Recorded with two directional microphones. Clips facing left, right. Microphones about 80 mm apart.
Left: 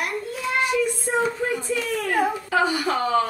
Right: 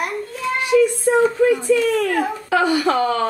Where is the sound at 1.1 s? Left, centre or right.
Right.